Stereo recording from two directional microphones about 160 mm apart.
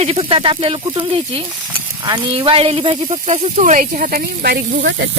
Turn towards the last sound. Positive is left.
turn(degrees=-90)